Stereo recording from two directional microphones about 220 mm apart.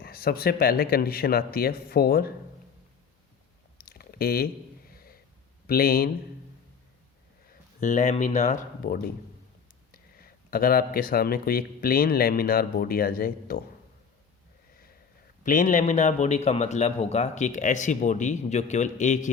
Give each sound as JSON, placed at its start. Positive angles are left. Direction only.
{"t": 0.0, "sound": "speech", "side_deg": 45}
{"t": 3.8, "sound": "a sound", "side_deg": 45}
{"t": 5.6, "sound": "speech", "side_deg": 45}
{"t": 7.8, "sound": "a man's voice", "side_deg": 30}
{"t": 15.4, "sound": "a man's voice", "side_deg": 35}